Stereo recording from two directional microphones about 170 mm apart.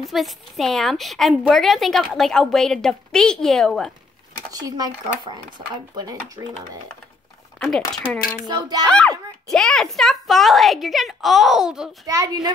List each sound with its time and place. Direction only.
0.0 s a woman's voice: centre (ahead or behind)
4.5 s speech: 20° right (ahead or behind)
7.5 s speech: 5° left (ahead or behind)
8.5 s speech: 25° right (ahead or behind)
8.8 s a woman's voice: 5° left (ahead or behind)
12.1 s speech: 20° right (ahead or behind)